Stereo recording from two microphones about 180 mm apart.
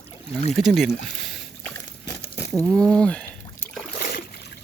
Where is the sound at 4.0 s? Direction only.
60° left (ahead or behind).